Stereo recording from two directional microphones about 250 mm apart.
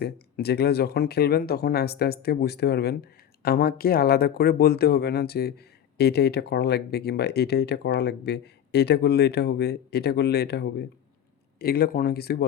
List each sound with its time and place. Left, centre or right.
0.0 s speech: left